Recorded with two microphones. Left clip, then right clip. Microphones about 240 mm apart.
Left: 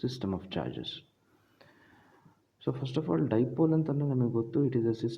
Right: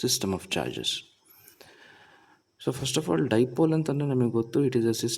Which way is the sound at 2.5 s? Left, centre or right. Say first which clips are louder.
Right 5 dB; right.